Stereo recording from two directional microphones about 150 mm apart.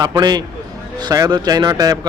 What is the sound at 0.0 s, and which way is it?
A man's voice, 25° right (ahead or behind).